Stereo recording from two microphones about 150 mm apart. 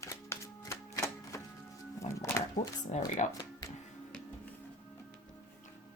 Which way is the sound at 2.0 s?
50° left (ahead or behind).